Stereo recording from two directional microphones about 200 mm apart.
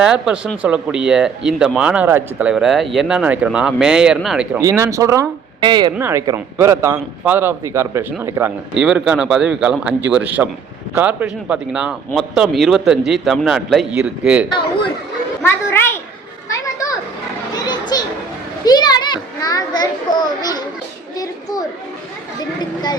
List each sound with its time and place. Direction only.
0.0 s speech: 5° right (ahead or behind)
4.6 s a man's voice: 15° right (ahead or behind)
5.9 s a man's voice: 10° right (ahead or behind)
15.4 s a sound: 10° left (ahead or behind)
17.5 s children playing: 20° left (ahead or behind)
21.2 s a sound: 20° left (ahead or behind)